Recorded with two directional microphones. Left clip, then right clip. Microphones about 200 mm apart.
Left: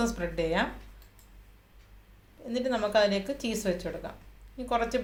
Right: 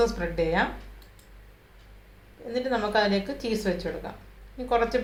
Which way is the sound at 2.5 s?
35° left (ahead or behind).